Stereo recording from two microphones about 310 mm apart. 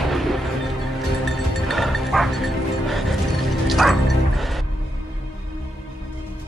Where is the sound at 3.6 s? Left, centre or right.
Centre.